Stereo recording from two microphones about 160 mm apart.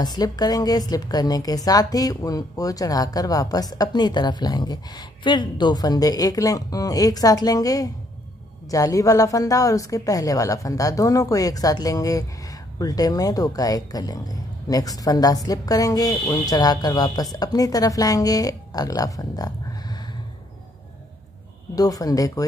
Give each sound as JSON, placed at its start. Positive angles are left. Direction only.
{"t": 0.0, "sound": "a woman's voice", "side_deg": 25}
{"t": 21.7, "sound": "a woman's voice", "side_deg": 20}